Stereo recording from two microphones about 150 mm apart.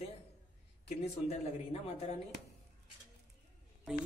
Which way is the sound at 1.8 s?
45° left (ahead or behind).